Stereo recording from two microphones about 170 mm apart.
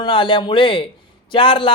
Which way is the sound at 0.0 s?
30° left (ahead or behind).